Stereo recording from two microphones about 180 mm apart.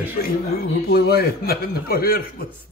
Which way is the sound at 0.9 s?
60° left (ahead or behind).